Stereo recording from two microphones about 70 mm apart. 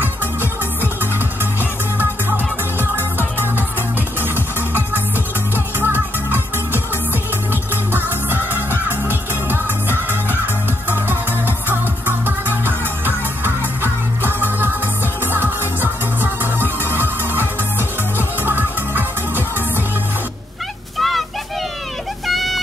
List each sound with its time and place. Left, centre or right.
0.0 s music: right
4.2 s music: right
8.5 s music: right
21.0 s a sound: centre